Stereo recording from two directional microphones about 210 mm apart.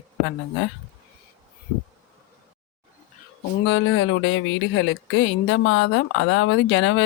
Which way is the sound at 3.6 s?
65° left (ahead or behind).